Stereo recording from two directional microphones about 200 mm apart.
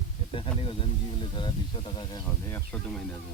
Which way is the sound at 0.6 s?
25° left (ahead or behind).